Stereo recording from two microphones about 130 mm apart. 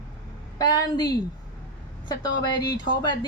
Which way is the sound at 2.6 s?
35° left (ahead or behind).